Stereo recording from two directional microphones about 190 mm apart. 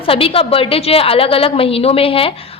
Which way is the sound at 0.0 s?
30° left (ahead or behind).